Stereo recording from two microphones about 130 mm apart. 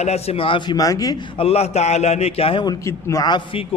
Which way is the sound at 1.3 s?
50° left (ahead or behind).